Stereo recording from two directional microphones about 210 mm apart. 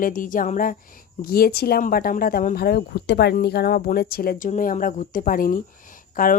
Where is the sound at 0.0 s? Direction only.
40° left (ahead or behind).